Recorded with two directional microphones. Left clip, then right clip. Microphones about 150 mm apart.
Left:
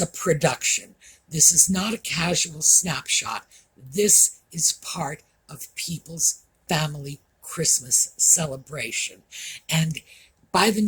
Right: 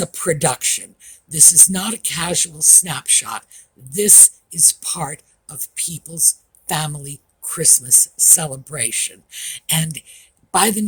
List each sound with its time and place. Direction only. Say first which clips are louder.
0.0 s speech: right 2 dB; 45° right (ahead or behind)